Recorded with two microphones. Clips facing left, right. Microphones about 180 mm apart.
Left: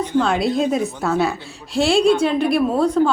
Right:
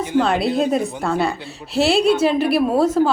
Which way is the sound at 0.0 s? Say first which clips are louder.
Even; 5° right (ahead or behind).